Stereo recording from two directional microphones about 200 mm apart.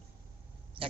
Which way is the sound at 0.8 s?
25° right (ahead or behind).